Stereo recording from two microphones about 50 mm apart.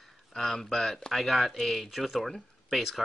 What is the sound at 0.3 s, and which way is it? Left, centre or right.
Speech, centre.